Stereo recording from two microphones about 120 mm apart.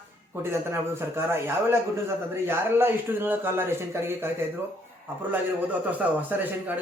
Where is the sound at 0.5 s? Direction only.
20° right (ahead or behind).